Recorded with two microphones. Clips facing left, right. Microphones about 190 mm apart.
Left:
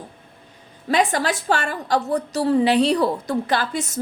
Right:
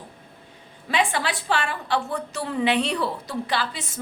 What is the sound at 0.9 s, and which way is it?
A woman's voice, 40° left (ahead or behind).